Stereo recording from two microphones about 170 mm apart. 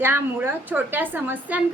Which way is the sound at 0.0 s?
15° right (ahead or behind).